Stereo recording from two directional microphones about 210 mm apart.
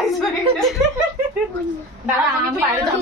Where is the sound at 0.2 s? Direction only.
Centre (ahead or behind).